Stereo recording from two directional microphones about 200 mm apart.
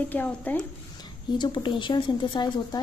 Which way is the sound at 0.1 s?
10° left (ahead or behind).